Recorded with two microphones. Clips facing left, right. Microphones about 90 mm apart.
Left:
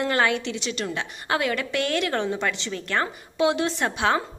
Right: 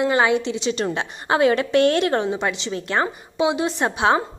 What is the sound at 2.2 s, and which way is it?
A woman's voice, 20° right (ahead or behind).